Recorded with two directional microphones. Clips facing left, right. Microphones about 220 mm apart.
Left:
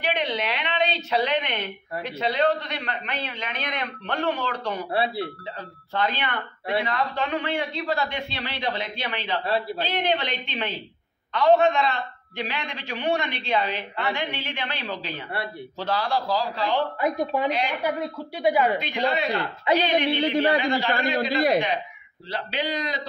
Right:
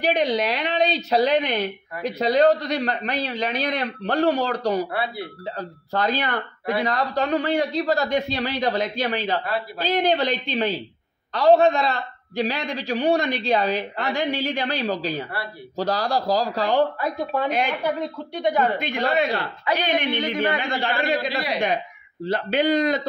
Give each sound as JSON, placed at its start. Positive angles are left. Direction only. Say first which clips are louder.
{"t": 0.0, "sound": "a woman's voice", "louder": "right 6 dB", "side_deg": -40}
{"t": 4.9, "sound": "speech", "louder": "left 2 dB", "side_deg": 30}
{"t": 5.6, "sound": "a woman's voice", "louder": "right 2 dB", "side_deg": -40}
{"t": 17.0, "sound": "a woman's voice", "louder": "left 1 dB", "side_deg": 15}
{"t": 17.5, "sound": "a man's voice", "louder": "right 2 dB", "side_deg": -50}
{"t": 17.8, "sound": "a woman's voice", "louder": "right 2 dB", "side_deg": 10}
{"t": 18.8, "sound": "a man's voice", "louder": "right 3 dB", "side_deg": -50}
{"t": 19.7, "sound": "a man's voice", "louder": "left 2 dB", "side_deg": 20}
{"t": 21.2, "sound": "a man's voice", "louder": "left 4 dB", "side_deg": 50}
{"t": 22.2, "sound": "a man's voice", "louder": "right 8 dB", "side_deg": -50}